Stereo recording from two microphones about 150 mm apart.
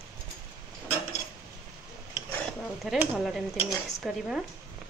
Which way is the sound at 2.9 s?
Centre (ahead or behind).